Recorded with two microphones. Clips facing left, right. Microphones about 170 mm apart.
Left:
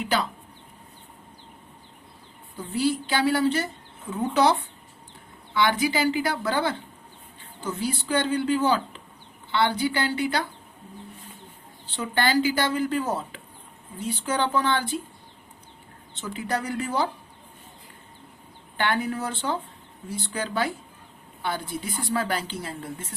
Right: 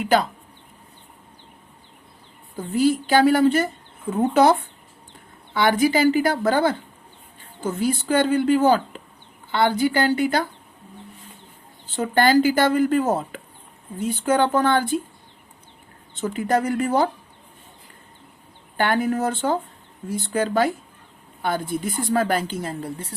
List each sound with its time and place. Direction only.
2.7 s a woman's voice: 45° right (ahead or behind)
5.5 s a woman's voice: 50° right (ahead or behind)
11.9 s a woman's voice: 45° right (ahead or behind)
16.2 s a woman's voice: 50° right (ahead or behind)
18.8 s a woman's voice: 45° right (ahead or behind)